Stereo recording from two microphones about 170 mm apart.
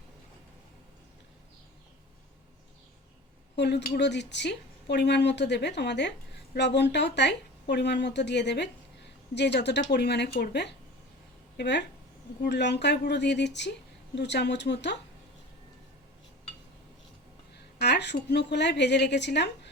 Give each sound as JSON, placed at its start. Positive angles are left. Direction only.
{"t": 3.5, "sound": "a woman's voice", "side_deg": 90}
{"t": 17.7, "sound": "a woman's voice", "side_deg": 80}